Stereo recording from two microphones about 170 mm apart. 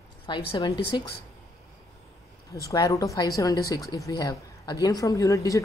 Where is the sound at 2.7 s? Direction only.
20° left (ahead or behind).